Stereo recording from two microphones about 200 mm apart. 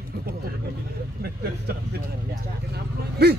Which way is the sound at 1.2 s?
50° right (ahead or behind).